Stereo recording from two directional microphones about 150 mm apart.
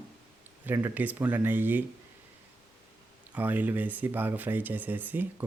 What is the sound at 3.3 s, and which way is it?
Speech, 10° right (ahead or behind).